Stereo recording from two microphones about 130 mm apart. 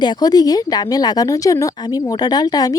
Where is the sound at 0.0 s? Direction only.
35° left (ahead or behind).